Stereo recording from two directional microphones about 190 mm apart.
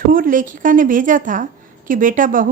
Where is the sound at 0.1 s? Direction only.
45° right (ahead or behind).